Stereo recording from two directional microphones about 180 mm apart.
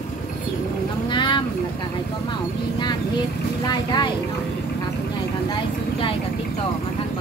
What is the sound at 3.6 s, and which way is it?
Speech, 25° left (ahead or behind).